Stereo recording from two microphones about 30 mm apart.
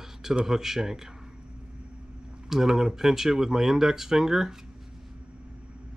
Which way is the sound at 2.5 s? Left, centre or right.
Centre.